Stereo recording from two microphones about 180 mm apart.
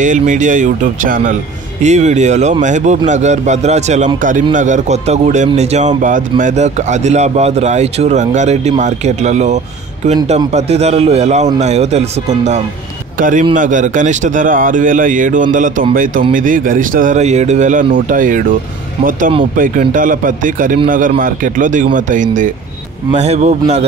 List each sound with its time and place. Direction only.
0.0 s speech: 45° right (ahead or behind)
19.5 s speech: 50° right (ahead or behind)